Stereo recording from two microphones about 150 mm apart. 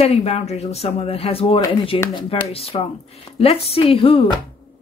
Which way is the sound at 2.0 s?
20° left (ahead or behind).